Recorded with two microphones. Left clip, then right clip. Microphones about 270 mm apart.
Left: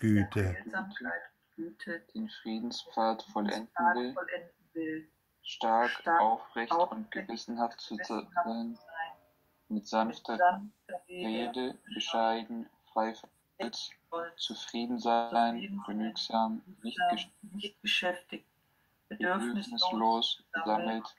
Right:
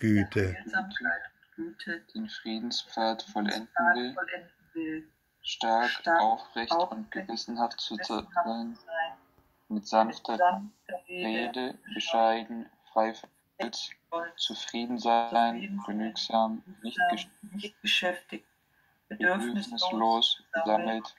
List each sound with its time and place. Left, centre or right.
0.0 s speech: centre
0.6 s speech: right
8.3 s speech: centre
9.8 s speech: right